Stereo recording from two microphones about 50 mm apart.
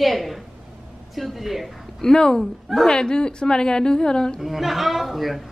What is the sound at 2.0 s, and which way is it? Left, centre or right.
Speech, centre.